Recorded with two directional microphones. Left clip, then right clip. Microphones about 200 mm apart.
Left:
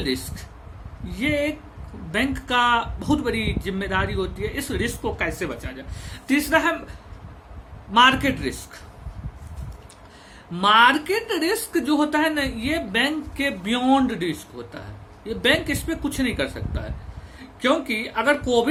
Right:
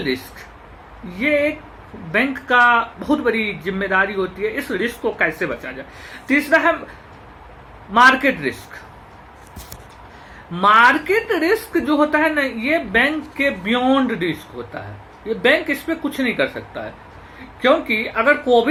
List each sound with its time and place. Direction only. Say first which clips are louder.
0.0 s speech: right 4 dB; 15° left (ahead or behind)
7.9 s speech: right 4 dB; 15° left (ahead or behind)
10.6 s speech: right 4 dB; 15° left (ahead or behind)